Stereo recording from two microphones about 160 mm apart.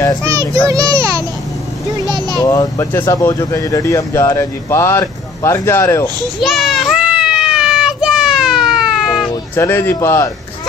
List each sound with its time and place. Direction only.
0.2 s a child's voice: 20° right (ahead or behind)
2.4 s speech: 25° left (ahead or behind)
6.4 s children playing: centre (ahead or behind)
9.3 s speech: 15° left (ahead or behind)